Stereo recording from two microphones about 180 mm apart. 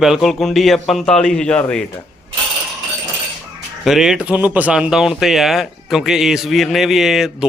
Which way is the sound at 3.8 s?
5° right (ahead or behind).